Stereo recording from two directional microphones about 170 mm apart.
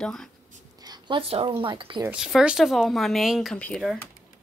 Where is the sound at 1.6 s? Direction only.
30° right (ahead or behind).